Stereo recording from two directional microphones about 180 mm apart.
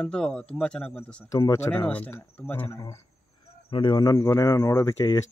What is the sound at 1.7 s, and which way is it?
Speech, 5° left (ahead or behind).